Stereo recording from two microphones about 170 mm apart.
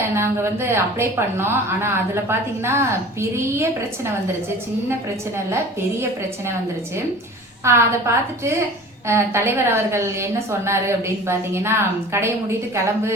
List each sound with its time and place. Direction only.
0.2 s a woman's voice: 15° right (ahead or behind)
7.6 s a woman's voice: 15° right (ahead or behind)